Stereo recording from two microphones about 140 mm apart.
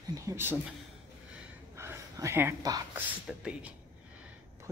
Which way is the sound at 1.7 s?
20° right (ahead or behind).